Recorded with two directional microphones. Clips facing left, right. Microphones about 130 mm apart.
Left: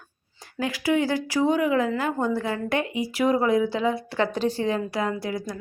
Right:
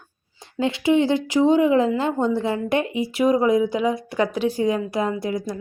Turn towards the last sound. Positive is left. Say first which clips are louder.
# right 3 dB
turn(degrees=-20)  # may be behind; listen again after turning